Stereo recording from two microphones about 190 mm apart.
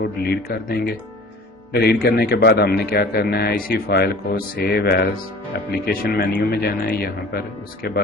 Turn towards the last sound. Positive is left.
turn(degrees=55)  # may be behind; listen again after turning